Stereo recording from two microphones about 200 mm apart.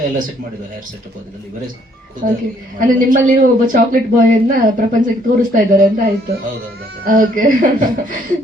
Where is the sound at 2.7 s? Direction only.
40° right (ahead or behind).